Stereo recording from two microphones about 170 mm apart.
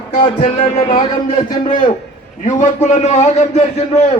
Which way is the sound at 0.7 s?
35° left (ahead or behind).